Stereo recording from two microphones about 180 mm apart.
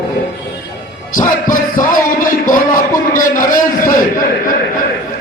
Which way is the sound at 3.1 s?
45° left (ahead or behind).